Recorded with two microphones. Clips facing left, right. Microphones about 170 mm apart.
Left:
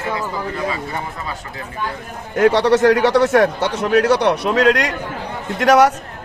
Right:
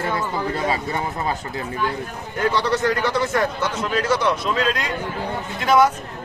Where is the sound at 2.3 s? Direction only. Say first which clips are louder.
Left 8 dB; 80° left.